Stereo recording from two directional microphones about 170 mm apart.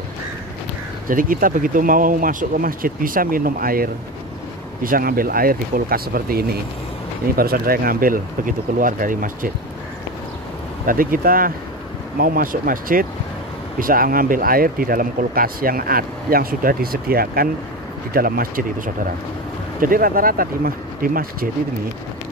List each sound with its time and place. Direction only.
1.0 s speech: 55° right (ahead or behind)
10.9 s speech: 55° right (ahead or behind)
19.8 s speech: 55° right (ahead or behind)